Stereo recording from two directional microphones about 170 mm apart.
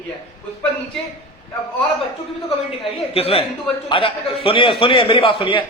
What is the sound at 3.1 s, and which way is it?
A man's voice, 35° left (ahead or behind).